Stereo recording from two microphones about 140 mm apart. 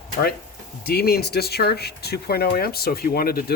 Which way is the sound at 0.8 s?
90° left.